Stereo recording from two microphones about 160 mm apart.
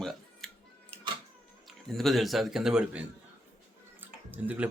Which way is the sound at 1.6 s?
Centre (ahead or behind).